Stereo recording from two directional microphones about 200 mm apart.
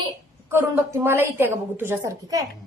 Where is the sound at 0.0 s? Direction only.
15° right (ahead or behind).